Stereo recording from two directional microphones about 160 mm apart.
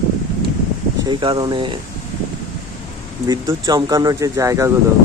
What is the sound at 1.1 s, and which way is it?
Speech, 30° right (ahead or behind).